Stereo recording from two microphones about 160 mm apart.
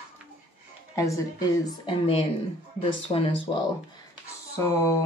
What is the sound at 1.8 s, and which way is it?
Speech, 35° left (ahead or behind).